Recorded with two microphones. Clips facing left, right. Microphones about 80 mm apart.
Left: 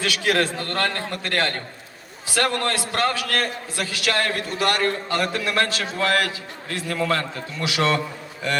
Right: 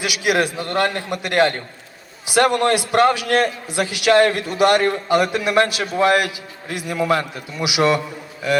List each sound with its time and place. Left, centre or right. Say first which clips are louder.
0.0 s a man's voice: right 2 dB; centre